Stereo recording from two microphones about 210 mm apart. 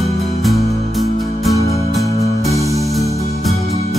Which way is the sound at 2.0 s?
15° left (ahead or behind).